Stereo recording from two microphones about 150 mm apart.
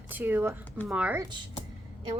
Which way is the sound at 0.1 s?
10° right (ahead or behind).